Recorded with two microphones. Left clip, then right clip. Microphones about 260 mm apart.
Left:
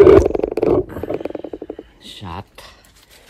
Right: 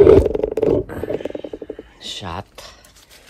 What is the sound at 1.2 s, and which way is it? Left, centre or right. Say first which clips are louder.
Wild animals: left 1 dB; centre.